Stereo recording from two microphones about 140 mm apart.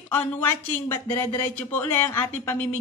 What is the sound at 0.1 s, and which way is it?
Speech, 15° left (ahead or behind).